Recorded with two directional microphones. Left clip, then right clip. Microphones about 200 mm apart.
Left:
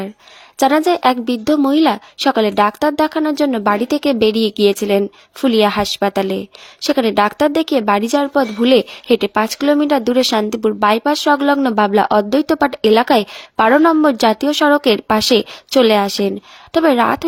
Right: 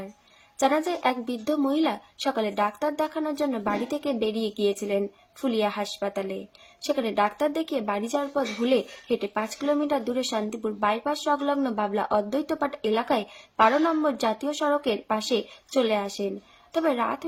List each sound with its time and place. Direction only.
0.6 s speech: 50° left (ahead or behind)